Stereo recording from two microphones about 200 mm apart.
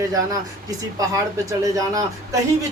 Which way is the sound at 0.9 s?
15° right (ahead or behind).